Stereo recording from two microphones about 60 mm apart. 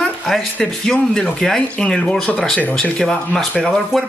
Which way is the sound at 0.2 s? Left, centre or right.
Centre.